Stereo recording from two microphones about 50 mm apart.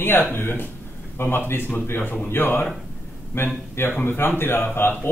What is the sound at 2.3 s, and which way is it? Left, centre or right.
Speech, left.